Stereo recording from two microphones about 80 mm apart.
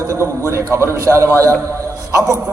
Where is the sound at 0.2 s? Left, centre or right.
Right.